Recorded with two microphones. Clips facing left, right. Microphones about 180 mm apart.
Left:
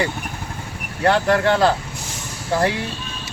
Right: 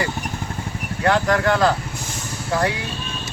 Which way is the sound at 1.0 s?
30° left (ahead or behind).